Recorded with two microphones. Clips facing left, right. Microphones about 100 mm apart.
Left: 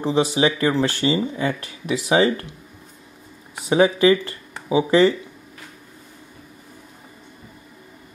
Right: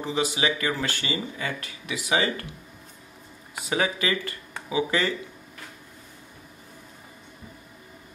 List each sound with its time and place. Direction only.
0.0 s speech: 30° left (ahead or behind)
3.6 s speech: 25° left (ahead or behind)